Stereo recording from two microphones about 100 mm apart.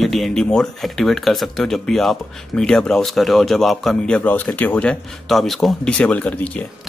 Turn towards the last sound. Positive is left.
turn(degrees=15)  # may be behind; listen again after turning